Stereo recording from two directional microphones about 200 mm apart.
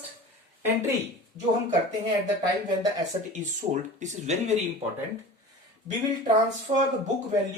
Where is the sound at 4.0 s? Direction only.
35° right (ahead or behind).